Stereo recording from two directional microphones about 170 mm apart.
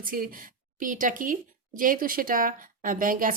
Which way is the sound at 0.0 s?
55° right (ahead or behind).